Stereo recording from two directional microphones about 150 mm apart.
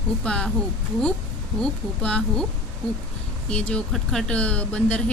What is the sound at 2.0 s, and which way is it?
Speech, 5° left (ahead or behind).